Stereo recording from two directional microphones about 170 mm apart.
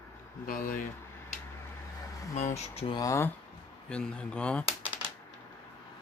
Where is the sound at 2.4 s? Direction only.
40° left (ahead or behind).